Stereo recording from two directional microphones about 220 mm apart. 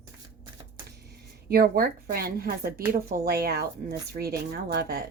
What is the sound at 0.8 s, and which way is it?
Speech, 45° right (ahead or behind).